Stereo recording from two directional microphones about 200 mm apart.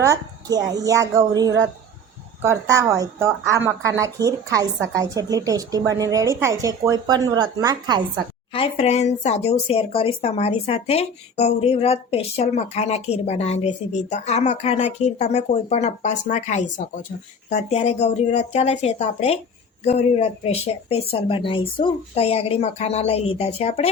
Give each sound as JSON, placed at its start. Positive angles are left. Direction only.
{"t": 0.0, "sound": "speech", "side_deg": -15}
{"t": 8.5, "sound": "a woman's voice", "side_deg": 30}